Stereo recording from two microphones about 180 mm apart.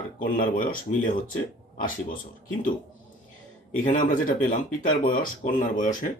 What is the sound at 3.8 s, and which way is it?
Speech, 45° left (ahead or behind).